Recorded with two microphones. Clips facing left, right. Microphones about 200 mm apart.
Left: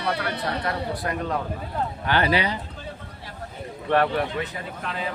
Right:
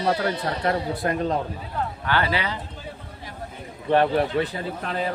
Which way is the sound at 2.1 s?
20° left (ahead or behind).